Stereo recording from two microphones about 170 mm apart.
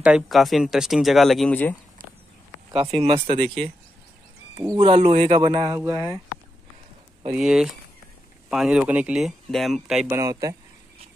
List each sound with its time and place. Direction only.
0.0 s speech: centre (ahead or behind)
3.0 s speech: 35° right (ahead or behind)
4.6 s speech: 30° right (ahead or behind)
5.8 s speech: 20° right (ahead or behind)
7.3 s speech: 5° right (ahead or behind)
10.0 s speech: 15° right (ahead or behind)